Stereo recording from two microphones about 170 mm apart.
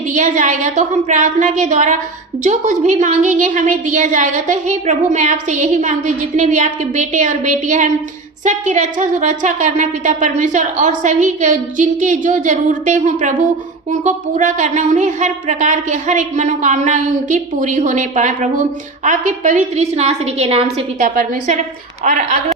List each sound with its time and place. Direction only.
0.1 s a woman's voice: 50° right (ahead or behind)
21.0 s a woman's voice: 50° right (ahead or behind)